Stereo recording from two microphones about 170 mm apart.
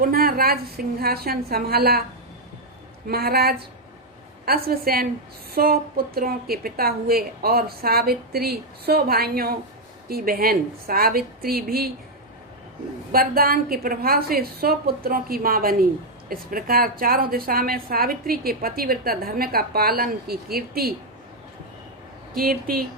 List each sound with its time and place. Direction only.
0.0 s a woman's voice: 60° right (ahead or behind)
3.1 s a woman's voice: 65° right (ahead or behind)
13.1 s a woman's voice: 60° right (ahead or behind)
22.4 s a woman's voice: 60° right (ahead or behind)